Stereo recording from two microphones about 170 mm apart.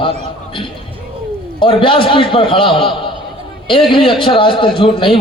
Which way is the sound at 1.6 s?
30° left (ahead or behind).